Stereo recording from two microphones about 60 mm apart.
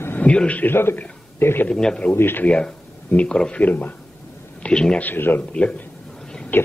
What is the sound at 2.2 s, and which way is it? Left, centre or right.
Speech, left.